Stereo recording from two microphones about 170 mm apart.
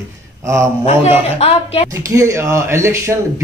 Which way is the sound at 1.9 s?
20° right (ahead or behind).